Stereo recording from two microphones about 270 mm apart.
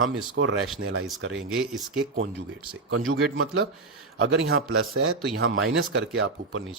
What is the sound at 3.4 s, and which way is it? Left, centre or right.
A man's voice, right.